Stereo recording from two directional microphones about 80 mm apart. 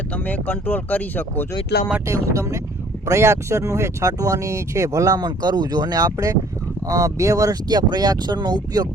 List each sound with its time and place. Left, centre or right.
0.1 s speech: centre
2.0 s speech: right